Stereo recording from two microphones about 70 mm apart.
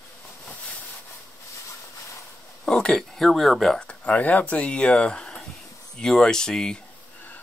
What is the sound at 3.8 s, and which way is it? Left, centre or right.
Speech, left.